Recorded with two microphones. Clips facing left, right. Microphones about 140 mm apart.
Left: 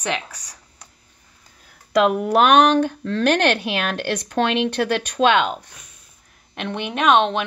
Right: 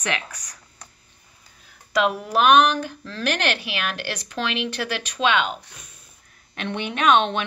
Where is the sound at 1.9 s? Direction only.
55° left (ahead or behind).